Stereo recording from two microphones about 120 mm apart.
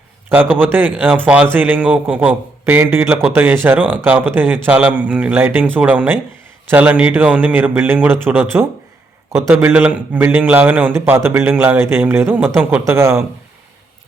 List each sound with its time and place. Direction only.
0.3 s a man's voice: 15° right (ahead or behind)